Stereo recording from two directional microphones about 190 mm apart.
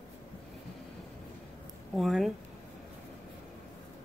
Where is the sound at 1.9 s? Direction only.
Centre (ahead or behind).